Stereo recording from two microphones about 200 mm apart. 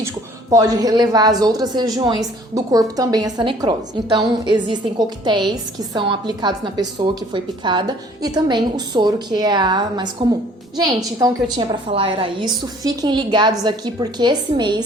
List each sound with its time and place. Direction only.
0.5 s a woman's voice: 20° right (ahead or behind)